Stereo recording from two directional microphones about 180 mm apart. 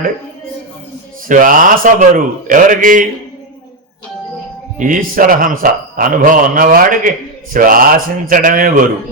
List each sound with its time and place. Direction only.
1.3 s speech: 50° right (ahead or behind)
4.8 s speech: 50° right (ahead or behind)